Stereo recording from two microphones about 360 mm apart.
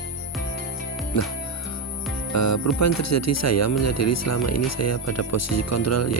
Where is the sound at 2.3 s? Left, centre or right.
Left.